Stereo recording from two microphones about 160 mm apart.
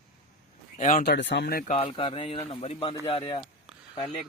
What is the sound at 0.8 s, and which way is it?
Speech, 55° left (ahead or behind).